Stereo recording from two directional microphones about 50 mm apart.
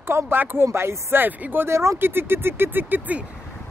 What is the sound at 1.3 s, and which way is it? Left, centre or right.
Speech, right.